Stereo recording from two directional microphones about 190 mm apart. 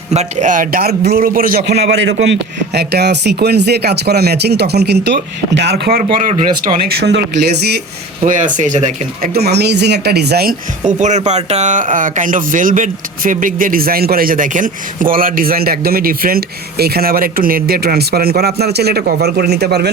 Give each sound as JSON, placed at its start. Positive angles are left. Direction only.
{"t": 0.1, "sound": "speech", "side_deg": -35}
{"t": 8.2, "sound": "speech", "side_deg": -40}
{"t": 9.3, "sound": "speech", "side_deg": -60}
{"t": 10.8, "sound": "speech", "side_deg": -40}